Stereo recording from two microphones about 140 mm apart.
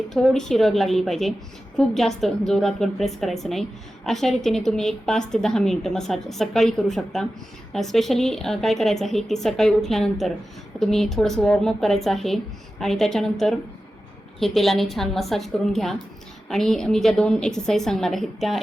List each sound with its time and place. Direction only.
0.1 s a woman's voice: 5° left (ahead or behind)